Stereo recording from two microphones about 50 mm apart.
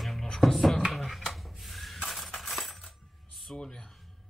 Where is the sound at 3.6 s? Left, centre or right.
Centre.